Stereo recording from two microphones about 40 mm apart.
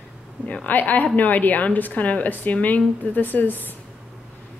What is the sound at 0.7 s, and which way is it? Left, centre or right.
A woman's voice, left.